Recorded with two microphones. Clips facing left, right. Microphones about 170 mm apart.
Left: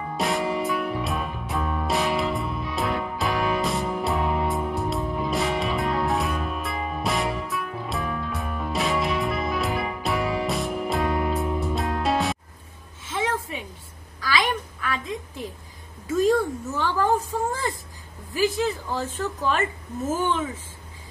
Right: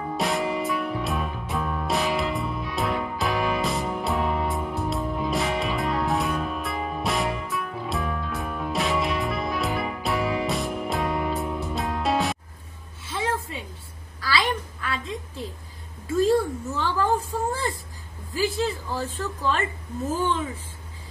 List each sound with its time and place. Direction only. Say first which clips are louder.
0.2 s music: left 1 dB; centre (ahead or behind)
14.2 s a sound: left 1 dB; 15° left (ahead or behind)
20.1 s speech: left 1 dB; 20° left (ahead or behind)